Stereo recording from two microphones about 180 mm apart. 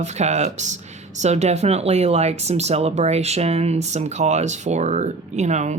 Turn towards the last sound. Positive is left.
turn(degrees=-40)  # may be behind; listen again after turning